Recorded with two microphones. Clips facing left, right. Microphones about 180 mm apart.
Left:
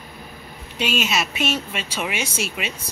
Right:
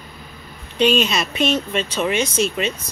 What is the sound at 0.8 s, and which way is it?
Speech, 5° left (ahead or behind).